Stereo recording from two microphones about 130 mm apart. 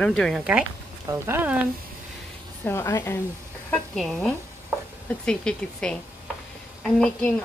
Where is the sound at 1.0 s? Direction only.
20° right (ahead or behind).